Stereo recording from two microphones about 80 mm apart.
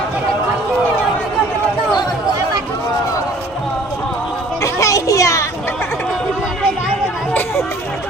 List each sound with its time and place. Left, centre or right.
4.6 s children playing: left